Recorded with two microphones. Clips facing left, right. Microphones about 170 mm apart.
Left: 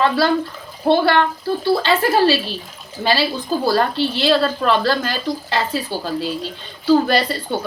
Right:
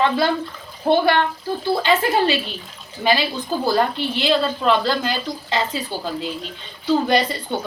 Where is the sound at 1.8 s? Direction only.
20° right (ahead or behind).